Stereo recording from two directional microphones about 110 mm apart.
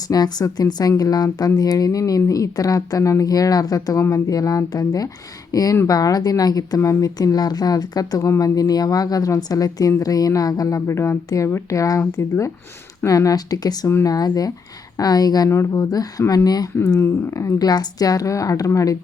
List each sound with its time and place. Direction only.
0.1 s speech: 35° left (ahead or behind)